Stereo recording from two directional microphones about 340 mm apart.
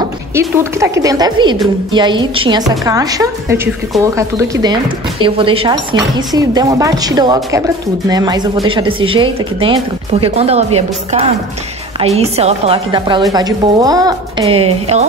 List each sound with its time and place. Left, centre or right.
0.3 s speech: centre